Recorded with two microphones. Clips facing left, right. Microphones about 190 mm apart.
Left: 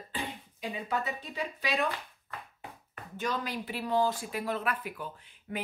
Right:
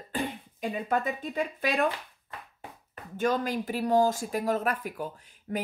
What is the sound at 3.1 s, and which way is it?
Speech, 50° right (ahead or behind).